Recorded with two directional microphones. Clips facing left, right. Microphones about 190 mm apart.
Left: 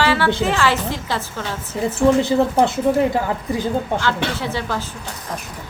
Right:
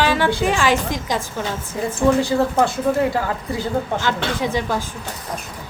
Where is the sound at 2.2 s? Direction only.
20° left (ahead or behind).